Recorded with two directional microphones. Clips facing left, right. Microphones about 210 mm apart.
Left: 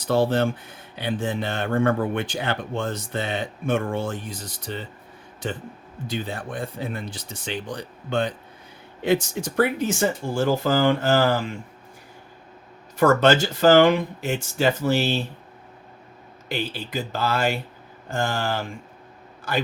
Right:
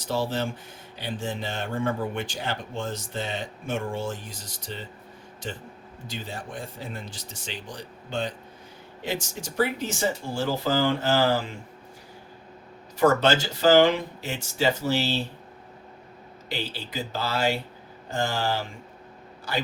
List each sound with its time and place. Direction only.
0.0 s speech: 60° left (ahead or behind)
6.1 s speech: 60° left (ahead or behind)
13.0 s speech: 50° left (ahead or behind)
16.5 s speech: 50° left (ahead or behind)